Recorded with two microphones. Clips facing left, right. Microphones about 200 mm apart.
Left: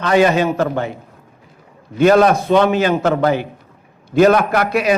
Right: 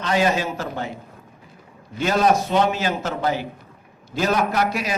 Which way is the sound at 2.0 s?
55° left (ahead or behind).